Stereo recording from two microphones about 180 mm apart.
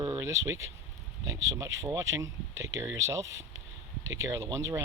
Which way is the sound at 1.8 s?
15° right (ahead or behind).